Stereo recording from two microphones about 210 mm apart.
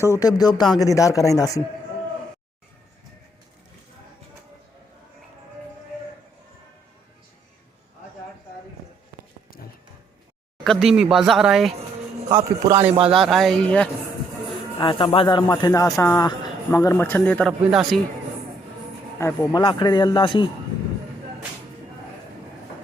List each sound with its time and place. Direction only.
0.0 s speech: 15° left (ahead or behind)
10.6 s speech: centre (ahead or behind)
12.3 s a man's voice: 20° right (ahead or behind)
12.8 s speech: 30° right (ahead or behind)
13.1 s speech: centre (ahead or behind)
14.8 s speech: 25° left (ahead or behind); by 18.0 s centre (ahead or behind)
19.5 s speech: 20° left (ahead or behind)